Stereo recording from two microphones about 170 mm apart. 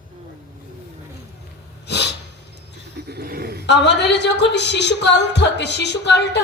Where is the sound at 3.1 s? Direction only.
65° right (ahead or behind).